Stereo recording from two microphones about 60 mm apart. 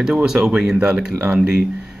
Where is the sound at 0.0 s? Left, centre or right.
Centre.